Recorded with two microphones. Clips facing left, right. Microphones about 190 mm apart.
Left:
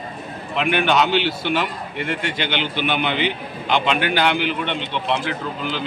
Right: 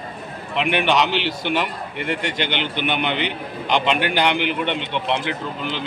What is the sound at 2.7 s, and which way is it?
A man's voice, 20° right (ahead or behind).